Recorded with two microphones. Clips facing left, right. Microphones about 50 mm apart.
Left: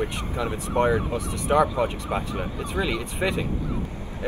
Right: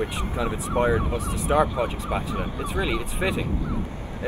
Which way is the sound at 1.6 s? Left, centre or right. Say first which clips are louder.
Left 1 dB; right.